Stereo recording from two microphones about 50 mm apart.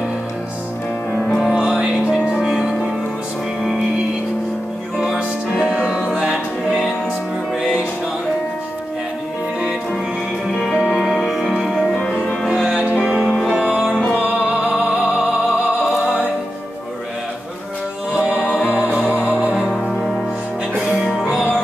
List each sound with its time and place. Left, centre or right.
1.5 s music: centre
4.9 s music: centre
11.1 s music: centre
13.2 s music: centre
13.5 s music: centre
18.1 s music: right
19.7 s music: centre